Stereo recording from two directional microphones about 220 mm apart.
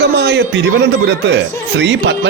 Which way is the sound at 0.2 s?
50° right (ahead or behind).